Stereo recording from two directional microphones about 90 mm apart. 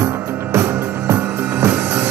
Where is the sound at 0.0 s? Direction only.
30° right (ahead or behind).